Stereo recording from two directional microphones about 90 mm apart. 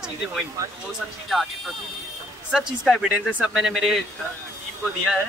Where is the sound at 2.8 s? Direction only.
10° right (ahead or behind).